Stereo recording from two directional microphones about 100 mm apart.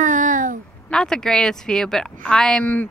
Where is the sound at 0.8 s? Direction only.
5° left (ahead or behind).